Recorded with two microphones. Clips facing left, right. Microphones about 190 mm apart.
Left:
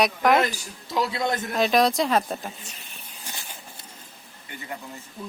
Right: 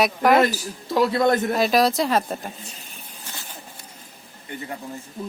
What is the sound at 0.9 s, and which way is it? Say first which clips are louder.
Speech: right 7 dB; 55° right (ahead or behind).